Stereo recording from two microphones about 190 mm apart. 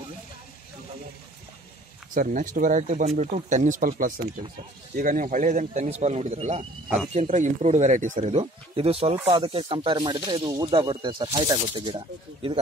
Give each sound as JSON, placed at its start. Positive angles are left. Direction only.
{"t": 2.1, "sound": "speech", "side_deg": -45}